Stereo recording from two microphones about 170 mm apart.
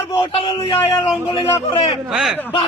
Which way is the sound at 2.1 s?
5° right (ahead or behind).